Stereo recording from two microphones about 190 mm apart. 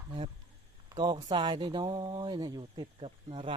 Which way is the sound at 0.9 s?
20° right (ahead or behind).